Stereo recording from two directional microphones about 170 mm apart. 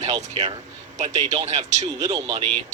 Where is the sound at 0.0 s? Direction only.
40° right (ahead or behind).